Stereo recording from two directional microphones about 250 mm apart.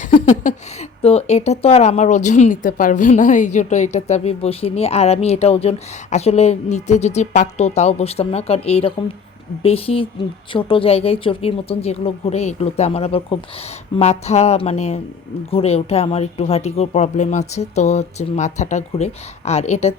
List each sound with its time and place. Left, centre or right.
0.0 s speech: left